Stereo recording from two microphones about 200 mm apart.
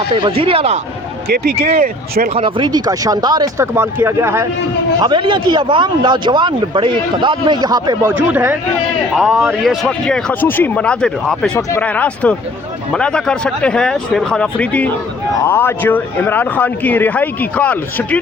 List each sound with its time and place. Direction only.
0.1 s speech: 25° right (ahead or behind)
1.3 s speech: 50° right (ahead or behind)
2.3 s speech: 25° right (ahead or behind)
4.9 s speech: 25° right (ahead or behind)
8.1 s speech: 10° right (ahead or behind); by 18.2 s 5° left (ahead or behind)